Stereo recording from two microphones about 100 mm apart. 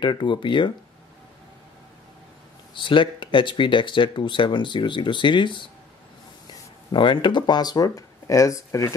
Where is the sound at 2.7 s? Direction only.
55° left (ahead or behind).